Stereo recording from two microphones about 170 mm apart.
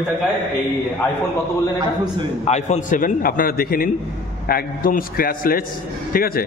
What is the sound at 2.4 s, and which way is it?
A man's voice, 40° left (ahead or behind).